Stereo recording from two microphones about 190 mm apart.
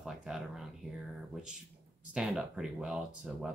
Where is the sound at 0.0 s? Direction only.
Centre (ahead or behind).